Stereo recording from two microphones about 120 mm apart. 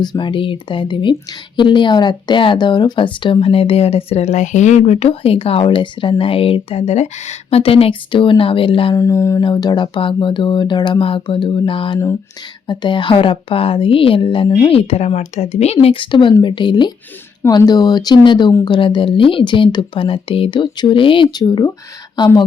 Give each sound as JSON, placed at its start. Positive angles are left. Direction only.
{"t": 0.0, "sound": "speech", "side_deg": 40}
{"t": 9.0, "sound": "mantra", "side_deg": 25}
{"t": 9.4, "sound": "speech", "side_deg": 40}